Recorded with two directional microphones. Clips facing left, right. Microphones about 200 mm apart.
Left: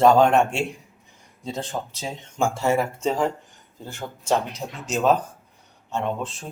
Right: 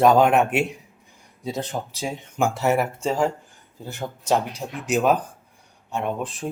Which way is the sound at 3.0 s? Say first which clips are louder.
Right 1 dB; centre (ahead or behind).